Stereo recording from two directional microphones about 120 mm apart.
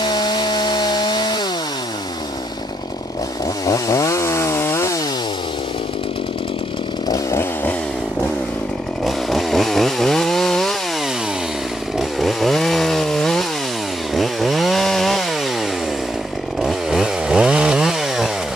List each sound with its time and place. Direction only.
0.0 s chainsaw: 35° left (ahead or behind)
3.6 s chainsaw: 30° left (ahead or behind)
7.1 s chainsaw: 20° left (ahead or behind)
9.0 s chainsaw: centre (ahead or behind)
12.0 s chainsaw: centre (ahead or behind)
16.6 s chainsaw: 5° right (ahead or behind)